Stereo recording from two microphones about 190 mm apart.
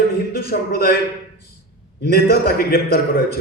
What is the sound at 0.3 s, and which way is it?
Speech, 55° left (ahead or behind).